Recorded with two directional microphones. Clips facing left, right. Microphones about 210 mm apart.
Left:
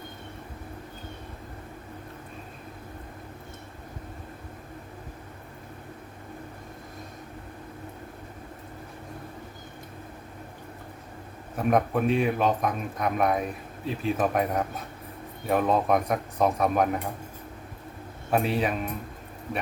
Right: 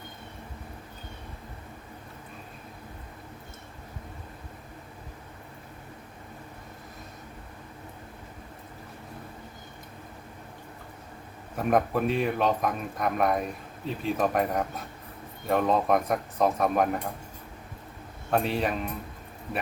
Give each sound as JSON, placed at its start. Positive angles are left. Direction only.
{"t": 11.5, "sound": "speech", "side_deg": 0}
{"t": 18.3, "sound": "speech", "side_deg": 5}